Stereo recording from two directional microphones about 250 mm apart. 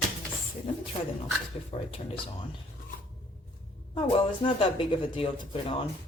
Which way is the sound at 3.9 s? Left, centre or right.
Centre.